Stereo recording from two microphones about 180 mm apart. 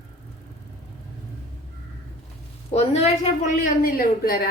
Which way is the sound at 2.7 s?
35° left (ahead or behind).